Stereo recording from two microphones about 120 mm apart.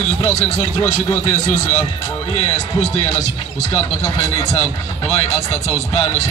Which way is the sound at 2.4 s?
70° left (ahead or behind).